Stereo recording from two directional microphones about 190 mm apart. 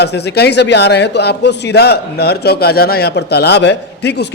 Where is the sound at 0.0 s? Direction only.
60° left (ahead or behind).